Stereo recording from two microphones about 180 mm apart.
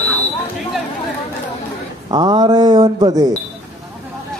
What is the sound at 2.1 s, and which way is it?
A man's voice, 25° right (ahead or behind).